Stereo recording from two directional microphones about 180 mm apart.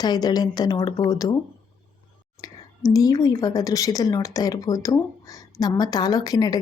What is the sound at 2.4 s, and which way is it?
Speech, 20° left (ahead or behind).